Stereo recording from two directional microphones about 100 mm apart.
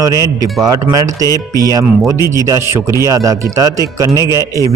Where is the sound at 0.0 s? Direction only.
35° right (ahead or behind).